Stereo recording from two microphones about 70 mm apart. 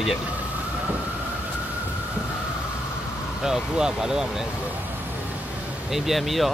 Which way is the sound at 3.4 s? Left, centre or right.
Centre.